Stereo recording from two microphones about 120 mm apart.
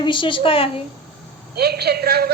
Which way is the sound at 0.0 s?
40° left (ahead or behind).